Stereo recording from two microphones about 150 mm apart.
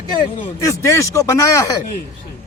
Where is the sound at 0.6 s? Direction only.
20° left (ahead or behind).